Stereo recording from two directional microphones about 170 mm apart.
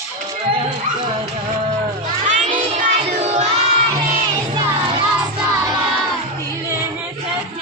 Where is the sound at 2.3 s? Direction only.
45° right (ahead or behind).